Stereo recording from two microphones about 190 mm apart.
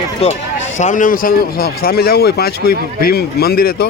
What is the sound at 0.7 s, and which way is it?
Speech, 40° left (ahead or behind).